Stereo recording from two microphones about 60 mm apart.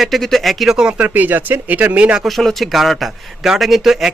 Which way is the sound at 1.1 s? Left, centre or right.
Right.